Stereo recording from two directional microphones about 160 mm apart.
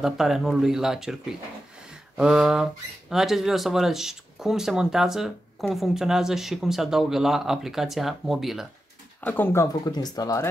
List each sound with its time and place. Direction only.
0.0 s speech: centre (ahead or behind)
9.2 s speech: 10° left (ahead or behind)